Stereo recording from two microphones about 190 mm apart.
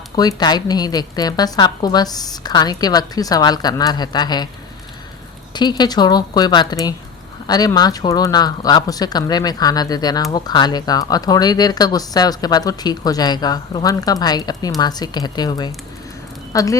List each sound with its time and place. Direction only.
0.2 s speech: 20° left (ahead or behind)
5.5 s speech: 20° left (ahead or behind)